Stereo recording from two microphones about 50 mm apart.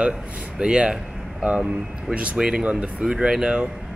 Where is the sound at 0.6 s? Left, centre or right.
Centre.